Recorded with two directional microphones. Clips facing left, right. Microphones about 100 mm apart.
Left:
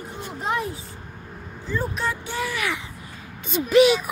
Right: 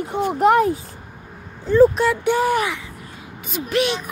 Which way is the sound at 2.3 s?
40° right (ahead or behind).